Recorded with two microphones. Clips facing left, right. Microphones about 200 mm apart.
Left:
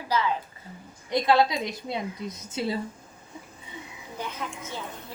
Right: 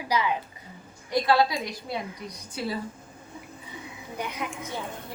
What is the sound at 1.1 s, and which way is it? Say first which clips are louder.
A woman's voice: left 1 dB; 20° left (ahead or behind).